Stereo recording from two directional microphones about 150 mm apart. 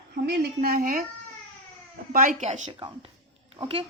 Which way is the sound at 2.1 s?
65° right (ahead or behind).